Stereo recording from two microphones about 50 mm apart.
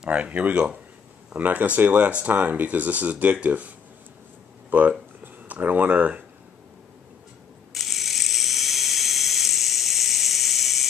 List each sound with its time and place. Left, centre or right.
0.0 s speech: right
4.6 s a sound: right
7.7 s ratchet: centre